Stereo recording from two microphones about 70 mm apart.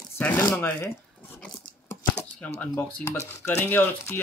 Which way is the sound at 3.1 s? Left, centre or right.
Left.